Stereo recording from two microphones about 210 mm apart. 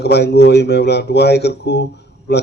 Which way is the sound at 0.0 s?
50° left (ahead or behind).